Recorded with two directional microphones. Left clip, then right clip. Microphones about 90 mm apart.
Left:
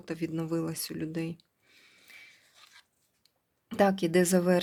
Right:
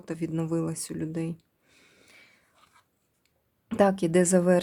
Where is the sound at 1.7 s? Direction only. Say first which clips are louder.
Even; 60° right (ahead or behind).